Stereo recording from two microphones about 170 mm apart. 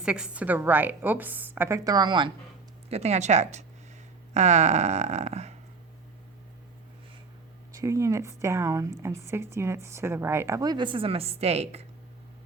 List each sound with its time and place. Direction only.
0.0 s a woman's voice: 5° right (ahead or behind); by 2.3 s 25° right (ahead or behind)
2.9 s a sound: 40° right (ahead or behind)
7.7 s a woman's voice: 20° right (ahead or behind); by 11.9 s 40° right (ahead or behind)